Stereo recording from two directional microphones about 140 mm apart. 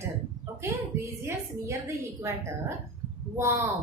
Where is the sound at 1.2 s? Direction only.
20° right (ahead or behind).